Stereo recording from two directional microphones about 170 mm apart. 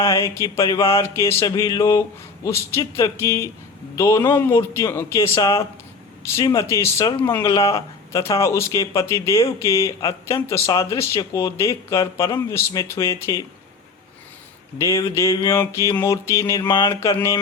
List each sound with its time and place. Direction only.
0.0 s speech: 20° left (ahead or behind)
4.2 s speech: 15° left (ahead or behind)
14.8 s speech: 20° left (ahead or behind)